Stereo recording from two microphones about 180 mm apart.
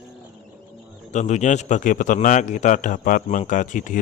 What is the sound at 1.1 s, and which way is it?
Speech, 40° left (ahead or behind).